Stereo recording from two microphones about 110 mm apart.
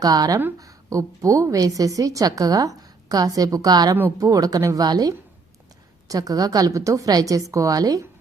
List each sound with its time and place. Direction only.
0.0 s a woman's voice: 35° right (ahead or behind)